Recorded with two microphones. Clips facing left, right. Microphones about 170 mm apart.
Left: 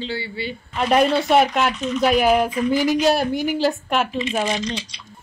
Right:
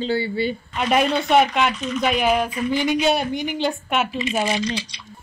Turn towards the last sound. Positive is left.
turn(degrees=0)  # may be behind; listen again after turning